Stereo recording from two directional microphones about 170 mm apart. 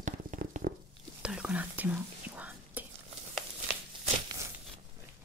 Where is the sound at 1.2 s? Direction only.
5° right (ahead or behind).